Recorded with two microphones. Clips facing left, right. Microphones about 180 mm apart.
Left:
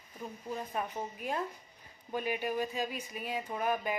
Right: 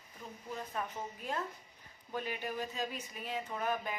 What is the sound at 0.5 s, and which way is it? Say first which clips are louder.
Speech: left 3 dB; 15° left (ahead or behind).